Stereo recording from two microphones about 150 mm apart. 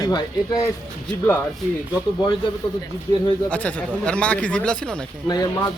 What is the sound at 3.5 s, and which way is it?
Speech, 10° left (ahead or behind).